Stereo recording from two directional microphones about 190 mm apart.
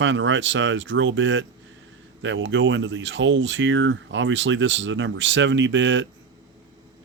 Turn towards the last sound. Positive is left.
turn(degrees=-75)  # may be behind; listen again after turning